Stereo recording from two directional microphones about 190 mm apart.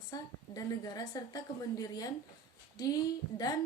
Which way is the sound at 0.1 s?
20° left (ahead or behind).